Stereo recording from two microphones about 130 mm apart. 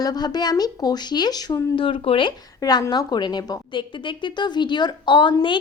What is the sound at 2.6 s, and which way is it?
A woman's voice, 30° left (ahead or behind).